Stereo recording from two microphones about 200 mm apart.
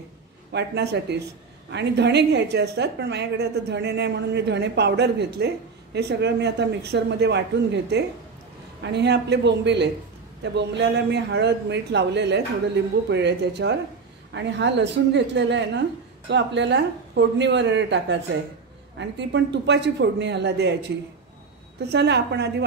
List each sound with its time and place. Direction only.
0.5 s a woman's voice: 60° right (ahead or behind)
21.8 s a woman's voice: 55° right (ahead or behind)